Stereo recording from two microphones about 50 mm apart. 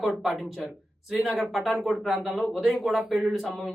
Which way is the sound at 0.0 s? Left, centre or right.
Centre.